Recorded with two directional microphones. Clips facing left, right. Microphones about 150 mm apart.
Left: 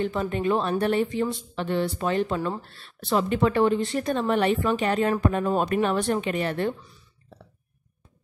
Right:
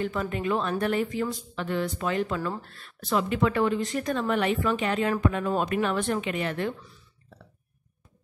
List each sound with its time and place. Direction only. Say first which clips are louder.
0.0 s a woman's voice: left 3 dB; 30° left (ahead or behind)